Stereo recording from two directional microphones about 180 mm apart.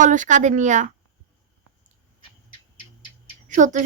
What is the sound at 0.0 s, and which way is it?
Speech, 45° right (ahead or behind).